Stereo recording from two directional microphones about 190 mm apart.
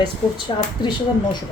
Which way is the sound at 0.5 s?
25° left (ahead or behind).